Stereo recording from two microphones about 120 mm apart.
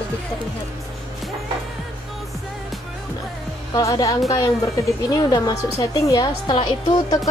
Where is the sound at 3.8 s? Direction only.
30° left (ahead or behind).